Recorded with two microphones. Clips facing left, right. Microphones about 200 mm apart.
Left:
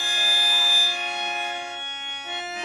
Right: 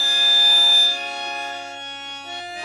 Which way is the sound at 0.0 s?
35° right (ahead or behind).